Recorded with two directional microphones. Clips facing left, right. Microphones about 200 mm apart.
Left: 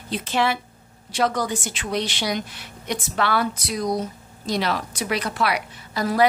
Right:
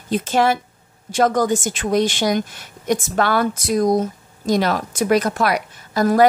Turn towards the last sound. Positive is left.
turn(degrees=-45)  # may be behind; listen again after turning